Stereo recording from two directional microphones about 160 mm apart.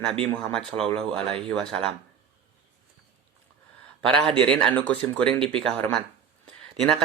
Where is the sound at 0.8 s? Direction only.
35° right (ahead or behind).